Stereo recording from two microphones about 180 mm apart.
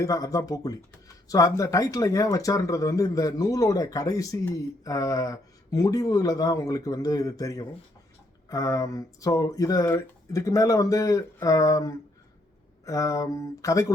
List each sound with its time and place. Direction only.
0.0 s speech: 20° left (ahead or behind)